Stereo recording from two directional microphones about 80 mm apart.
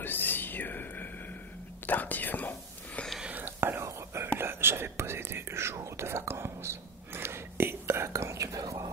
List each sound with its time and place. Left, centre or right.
0.0 s whispering: left
1.9 s speech: left
3.2 s whispering: centre
3.4 s whispering: right